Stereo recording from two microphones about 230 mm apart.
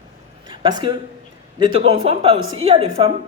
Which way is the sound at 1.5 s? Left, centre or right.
Right.